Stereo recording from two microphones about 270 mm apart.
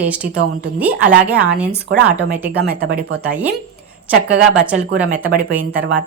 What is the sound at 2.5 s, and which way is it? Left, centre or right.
Speech, right.